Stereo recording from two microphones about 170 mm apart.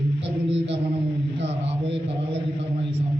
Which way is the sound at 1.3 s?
35° right (ahead or behind).